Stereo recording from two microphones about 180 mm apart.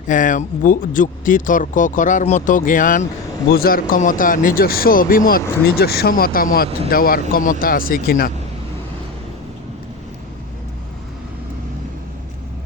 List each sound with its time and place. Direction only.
0.1 s speech: 45° left (ahead or behind)